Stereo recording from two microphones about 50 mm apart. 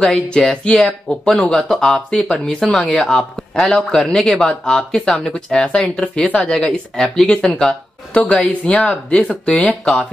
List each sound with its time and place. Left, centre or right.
0.0 s speech: centre
6.5 s speech: centre
8.1 s speech: left